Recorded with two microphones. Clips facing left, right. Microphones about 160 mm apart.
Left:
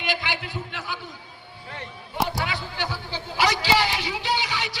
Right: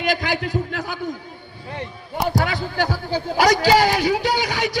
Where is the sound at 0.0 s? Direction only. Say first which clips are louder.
Right 7 dB; 40° right (ahead or behind).